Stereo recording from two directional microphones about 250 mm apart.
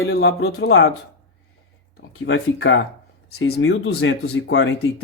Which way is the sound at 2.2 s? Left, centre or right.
Left.